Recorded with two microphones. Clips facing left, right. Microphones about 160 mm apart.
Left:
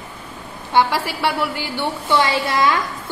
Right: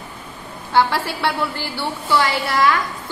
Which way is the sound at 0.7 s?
15° left (ahead or behind).